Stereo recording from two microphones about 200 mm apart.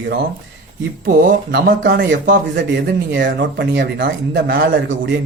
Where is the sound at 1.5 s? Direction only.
55° right (ahead or behind).